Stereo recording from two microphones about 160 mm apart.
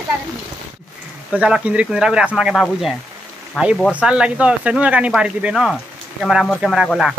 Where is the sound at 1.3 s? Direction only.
5° right (ahead or behind).